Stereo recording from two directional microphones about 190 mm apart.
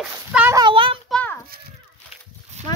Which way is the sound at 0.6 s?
25° right (ahead or behind).